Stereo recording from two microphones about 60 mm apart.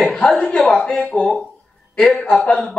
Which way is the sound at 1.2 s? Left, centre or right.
Centre.